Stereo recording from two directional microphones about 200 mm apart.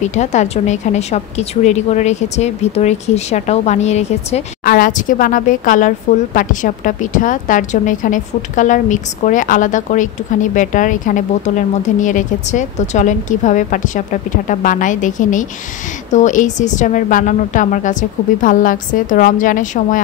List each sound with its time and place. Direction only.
0.0 s a woman's voice: 35° left (ahead or behind)